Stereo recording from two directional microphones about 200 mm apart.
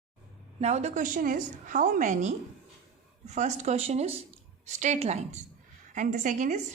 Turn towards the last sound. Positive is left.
turn(degrees=-40)  # may be behind; listen again after turning